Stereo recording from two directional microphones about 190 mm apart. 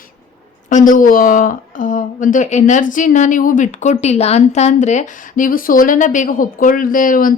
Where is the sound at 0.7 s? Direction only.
45° left (ahead or behind).